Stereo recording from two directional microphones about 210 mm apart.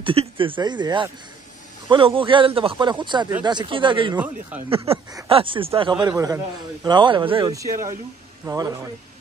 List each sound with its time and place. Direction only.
0.0 s a man's voice: 25° right (ahead or behind)